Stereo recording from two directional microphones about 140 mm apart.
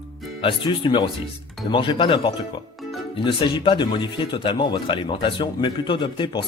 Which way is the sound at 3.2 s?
35° left (ahead or behind).